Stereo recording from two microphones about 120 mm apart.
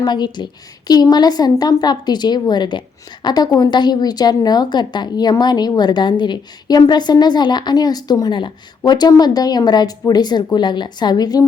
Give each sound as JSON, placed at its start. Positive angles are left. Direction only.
{"t": 0.0, "sound": "a woman's voice", "side_deg": 35}